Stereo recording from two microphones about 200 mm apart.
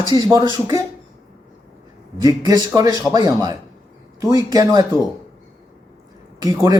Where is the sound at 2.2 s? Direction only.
20° right (ahead or behind).